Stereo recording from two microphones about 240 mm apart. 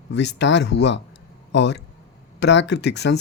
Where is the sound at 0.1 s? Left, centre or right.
Left.